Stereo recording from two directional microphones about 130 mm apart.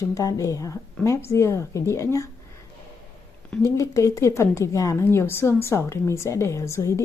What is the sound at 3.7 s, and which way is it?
A woman's voice, 25° left (ahead or behind).